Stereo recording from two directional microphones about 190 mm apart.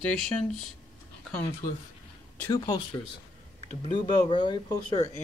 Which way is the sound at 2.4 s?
15° left (ahead or behind).